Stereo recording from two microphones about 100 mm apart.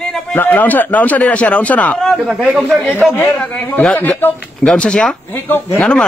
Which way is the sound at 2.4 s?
Centre (ahead or behind).